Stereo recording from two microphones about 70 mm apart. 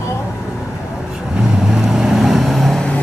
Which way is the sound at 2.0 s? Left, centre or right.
Centre.